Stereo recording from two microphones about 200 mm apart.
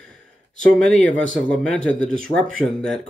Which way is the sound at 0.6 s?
Centre (ahead or behind).